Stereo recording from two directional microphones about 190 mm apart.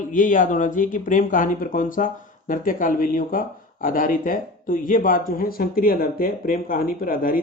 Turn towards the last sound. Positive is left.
turn(degrees=50)  # may be behind; listen again after turning